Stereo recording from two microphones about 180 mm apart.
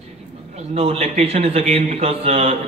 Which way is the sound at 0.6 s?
35° right (ahead or behind).